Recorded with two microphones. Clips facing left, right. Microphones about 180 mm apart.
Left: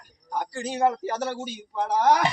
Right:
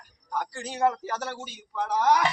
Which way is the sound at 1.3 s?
30° left (ahead or behind).